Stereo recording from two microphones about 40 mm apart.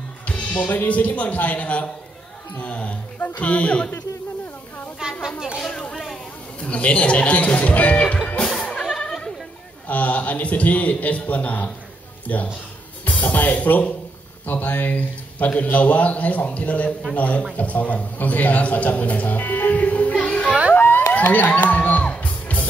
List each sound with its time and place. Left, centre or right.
0.3 s music: left
0.7 s a man's voice: left
3.2 s a man's voice: left
3.4 s a man's voice: left
5.0 s a sound: centre
5.6 s a sound: centre
6.6 s a man's voice: left
8.9 s goat: centre
9.8 s a man's voice: left
13.0 s a man's voice: left
20.7 s a sound: left
22.1 s music: left